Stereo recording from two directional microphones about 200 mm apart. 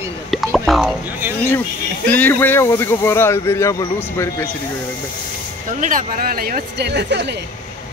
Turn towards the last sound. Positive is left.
turn(degrees=-60)  # may be behind; listen again after turning